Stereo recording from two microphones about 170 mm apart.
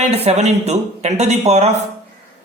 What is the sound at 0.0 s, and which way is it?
A man's voice, 40° right (ahead or behind).